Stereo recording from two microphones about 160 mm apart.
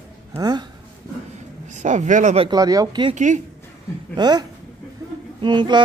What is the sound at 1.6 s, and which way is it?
Speech, 50° right (ahead or behind).